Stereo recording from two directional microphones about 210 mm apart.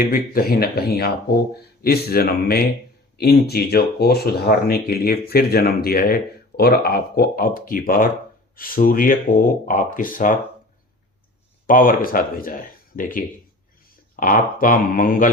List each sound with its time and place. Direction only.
0.0 s speech: 45° left (ahead or behind)
11.6 s speech: 40° left (ahead or behind)